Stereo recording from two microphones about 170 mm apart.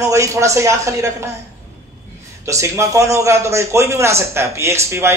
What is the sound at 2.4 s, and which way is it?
A man's voice, 15° right (ahead or behind).